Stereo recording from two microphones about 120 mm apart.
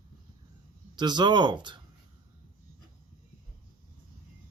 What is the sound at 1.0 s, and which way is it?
Speech, 40° right (ahead or behind).